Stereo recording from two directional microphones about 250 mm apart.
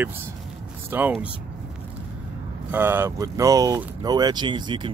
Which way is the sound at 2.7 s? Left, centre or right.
Centre.